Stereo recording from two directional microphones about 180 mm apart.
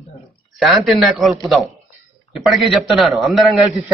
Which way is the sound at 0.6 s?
Centre (ahead or behind).